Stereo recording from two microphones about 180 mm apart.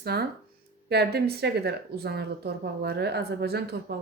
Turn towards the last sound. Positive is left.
turn(degrees=-65)  # may be behind; listen again after turning